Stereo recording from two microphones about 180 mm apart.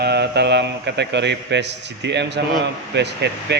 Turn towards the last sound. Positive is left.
turn(degrees=-70)  # may be behind; listen again after turning